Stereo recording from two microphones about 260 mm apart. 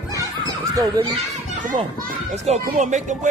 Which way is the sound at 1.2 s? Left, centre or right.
Right.